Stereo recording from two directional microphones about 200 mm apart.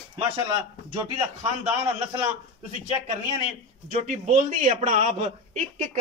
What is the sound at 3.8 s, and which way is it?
A man's voice, 40° right (ahead or behind).